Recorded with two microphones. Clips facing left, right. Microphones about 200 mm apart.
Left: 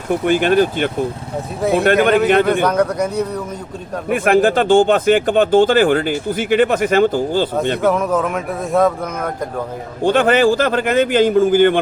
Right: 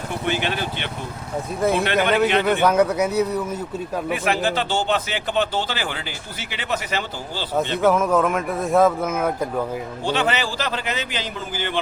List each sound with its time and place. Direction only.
0.3 s speech: 50° left (ahead or behind)
2.5 s speech: 5° right (ahead or behind)
4.1 s speech: 50° left (ahead or behind)
7.8 s speech: centre (ahead or behind)
10.0 s speech: 50° left (ahead or behind)